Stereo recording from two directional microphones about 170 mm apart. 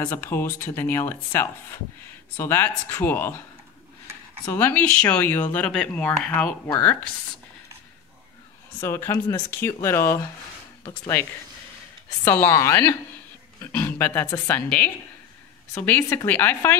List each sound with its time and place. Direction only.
0.0 s speech: 10° left (ahead or behind)
4.5 s speech: 15° left (ahead or behind)
8.8 s speech: 15° left (ahead or behind)
12.3 s a woman's voice: 15° left (ahead or behind)
15.7 s speech: 10° left (ahead or behind)